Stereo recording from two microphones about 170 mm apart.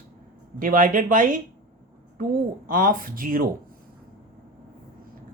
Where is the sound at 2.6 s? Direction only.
55° right (ahead or behind).